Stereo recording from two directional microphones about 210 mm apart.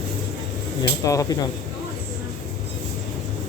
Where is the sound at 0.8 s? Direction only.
15° left (ahead or behind).